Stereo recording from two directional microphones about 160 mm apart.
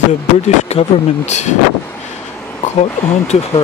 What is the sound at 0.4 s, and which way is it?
Speech, 45° left (ahead or behind).